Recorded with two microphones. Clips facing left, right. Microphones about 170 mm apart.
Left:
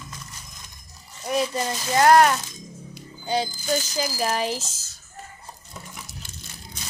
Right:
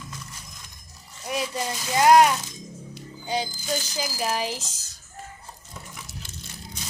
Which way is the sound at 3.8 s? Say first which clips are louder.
Left 3 dB; 10° right (ahead or behind).